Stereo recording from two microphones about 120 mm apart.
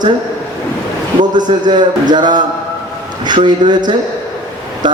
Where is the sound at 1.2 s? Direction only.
40° right (ahead or behind).